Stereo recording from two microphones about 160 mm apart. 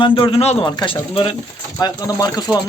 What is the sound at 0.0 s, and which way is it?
Speech, 35° left (ahead or behind).